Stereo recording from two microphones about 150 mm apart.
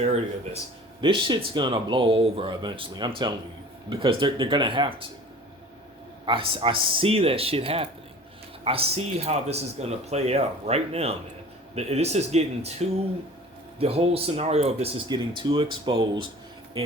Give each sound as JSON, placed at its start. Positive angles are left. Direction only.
{"t": 0.0, "sound": "speech", "side_deg": -45}
{"t": 1.0, "sound": "speech", "side_deg": -35}
{"t": 6.2, "sound": "speech", "side_deg": -35}